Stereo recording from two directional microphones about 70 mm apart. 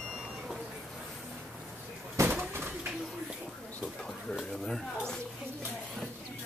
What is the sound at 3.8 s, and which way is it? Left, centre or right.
Pigeon, centre.